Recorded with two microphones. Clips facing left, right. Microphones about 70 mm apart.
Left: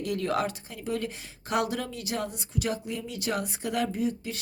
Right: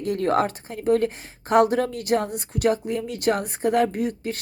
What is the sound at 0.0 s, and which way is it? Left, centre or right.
A woman's voice, right.